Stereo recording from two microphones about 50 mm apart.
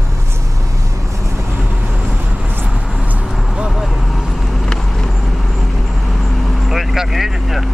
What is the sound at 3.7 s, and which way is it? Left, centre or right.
Vehicle, centre.